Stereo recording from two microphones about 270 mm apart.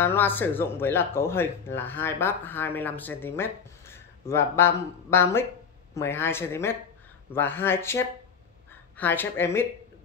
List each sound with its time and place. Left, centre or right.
0.0 s speech: centre